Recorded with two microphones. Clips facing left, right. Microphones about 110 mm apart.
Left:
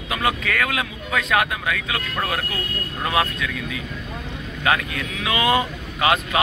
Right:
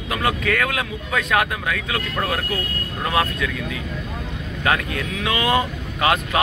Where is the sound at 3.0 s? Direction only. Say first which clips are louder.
Even; 15° left (ahead or behind).